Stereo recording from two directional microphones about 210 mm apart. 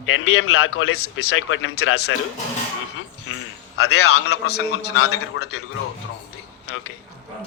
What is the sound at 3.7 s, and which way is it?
A man's voice, 90° left.